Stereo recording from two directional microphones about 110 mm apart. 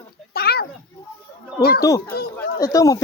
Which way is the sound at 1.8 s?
30° left (ahead or behind).